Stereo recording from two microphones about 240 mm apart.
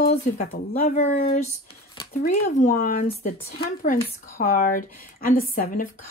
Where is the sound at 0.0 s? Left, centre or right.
Left.